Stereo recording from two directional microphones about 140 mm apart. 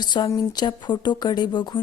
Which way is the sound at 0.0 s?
30° left (ahead or behind).